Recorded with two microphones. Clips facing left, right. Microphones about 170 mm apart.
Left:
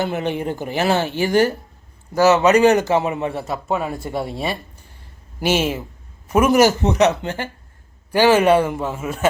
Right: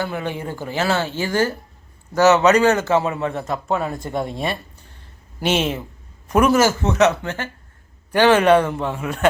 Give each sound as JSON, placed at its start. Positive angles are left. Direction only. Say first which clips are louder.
{"t": 0.0, "sound": "a man's voice", "louder": "left 3 dB", "side_deg": 20}